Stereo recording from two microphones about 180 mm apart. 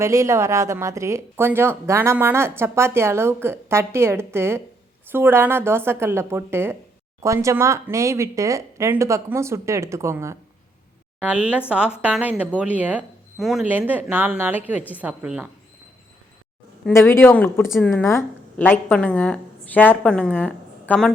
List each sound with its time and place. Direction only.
0.0 s speech: 15° right (ahead or behind)
16.9 s speech: 15° left (ahead or behind)